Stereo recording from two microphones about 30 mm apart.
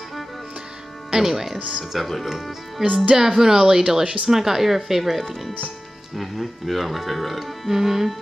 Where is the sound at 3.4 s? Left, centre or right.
Centre.